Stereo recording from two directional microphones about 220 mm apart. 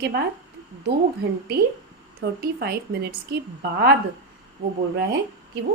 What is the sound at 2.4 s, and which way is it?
A woman's voice, 45° right (ahead or behind).